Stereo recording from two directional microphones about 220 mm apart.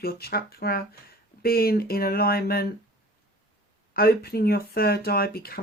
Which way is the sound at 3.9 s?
45° left (ahead or behind).